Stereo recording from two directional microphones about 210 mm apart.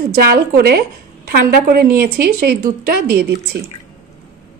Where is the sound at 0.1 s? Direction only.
50° right (ahead or behind).